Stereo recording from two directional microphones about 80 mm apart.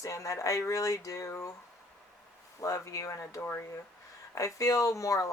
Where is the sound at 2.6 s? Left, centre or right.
Left.